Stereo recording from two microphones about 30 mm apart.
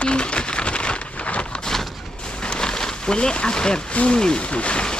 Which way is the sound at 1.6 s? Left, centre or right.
Centre.